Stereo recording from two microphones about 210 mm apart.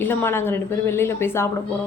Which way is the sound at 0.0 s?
10° left (ahead or behind).